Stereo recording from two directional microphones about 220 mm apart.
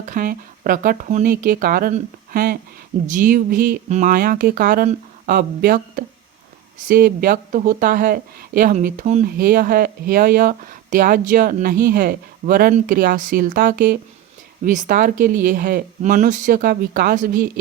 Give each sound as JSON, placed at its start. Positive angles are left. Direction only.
{"t": 0.0, "sound": "speech", "side_deg": -40}